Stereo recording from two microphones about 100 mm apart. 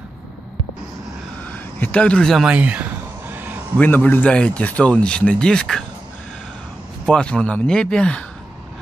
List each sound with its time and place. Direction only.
1.5 s speech: 15° left (ahead or behind)
2.4 s a sound: 15° right (ahead or behind)
3.7 s speech: 15° left (ahead or behind)
7.1 s speech: 10° left (ahead or behind)